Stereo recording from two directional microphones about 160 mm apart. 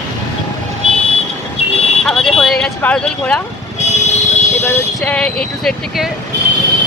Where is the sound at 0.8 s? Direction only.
35° left (ahead or behind).